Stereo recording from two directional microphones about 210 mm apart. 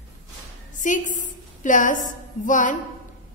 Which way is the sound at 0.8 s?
35° left (ahead or behind).